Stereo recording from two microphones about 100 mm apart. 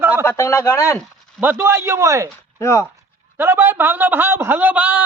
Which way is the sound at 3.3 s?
20° right (ahead or behind).